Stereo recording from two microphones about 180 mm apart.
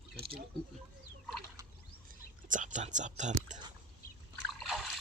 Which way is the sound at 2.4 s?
45° right (ahead or behind).